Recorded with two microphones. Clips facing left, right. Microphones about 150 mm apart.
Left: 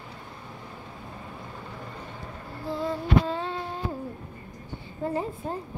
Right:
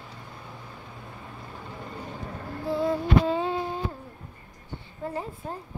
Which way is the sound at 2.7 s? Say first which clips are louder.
Right 2 dB; 5° right (ahead or behind).